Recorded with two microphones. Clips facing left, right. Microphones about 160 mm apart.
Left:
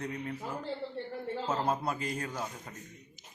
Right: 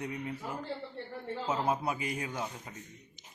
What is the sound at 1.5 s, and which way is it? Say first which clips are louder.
Speech: right 1 dB; 10° right (ahead or behind).